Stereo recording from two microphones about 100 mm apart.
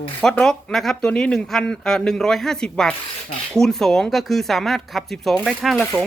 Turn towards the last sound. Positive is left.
turn(degrees=0)  # may be behind; listen again after turning